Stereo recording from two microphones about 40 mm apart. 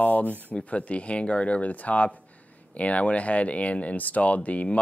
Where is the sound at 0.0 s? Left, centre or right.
Left.